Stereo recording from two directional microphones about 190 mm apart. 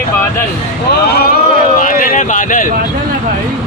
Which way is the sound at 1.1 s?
55° left (ahead or behind).